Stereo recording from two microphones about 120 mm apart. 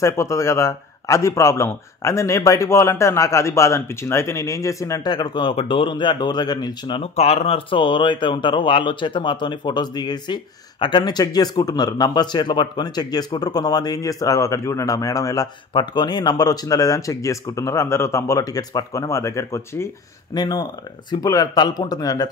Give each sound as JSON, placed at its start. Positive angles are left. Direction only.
{"t": 0.0, "sound": "a man's voice", "side_deg": 25}
{"t": 7.0, "sound": "speech", "side_deg": 55}
{"t": 15.7, "sound": "a man's voice", "side_deg": 40}
{"t": 20.3, "sound": "a man's voice", "side_deg": 35}